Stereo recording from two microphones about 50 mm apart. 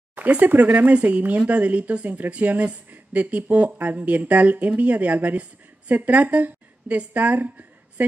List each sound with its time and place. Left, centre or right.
0.3 s speech: right